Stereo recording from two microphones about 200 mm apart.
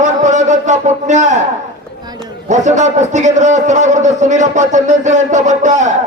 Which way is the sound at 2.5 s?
35° right (ahead or behind).